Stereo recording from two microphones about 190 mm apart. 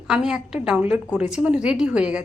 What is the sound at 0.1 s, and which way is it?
A woman's voice, 5° right (ahead or behind).